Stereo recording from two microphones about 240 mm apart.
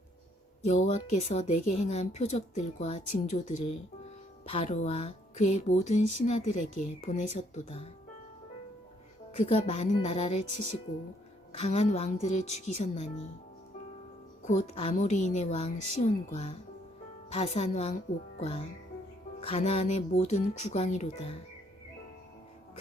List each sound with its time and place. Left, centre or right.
0.6 s a woman's voice: left
9.3 s a woman's voice: left
11.5 s a woman's voice: left
14.4 s a woman's voice: left
19.4 s a woman's voice: left